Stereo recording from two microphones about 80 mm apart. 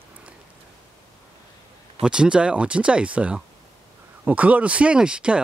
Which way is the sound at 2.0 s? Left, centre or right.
Centre.